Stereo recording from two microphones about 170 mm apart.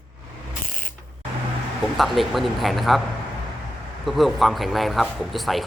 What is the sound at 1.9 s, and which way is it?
Speech, centre (ahead or behind).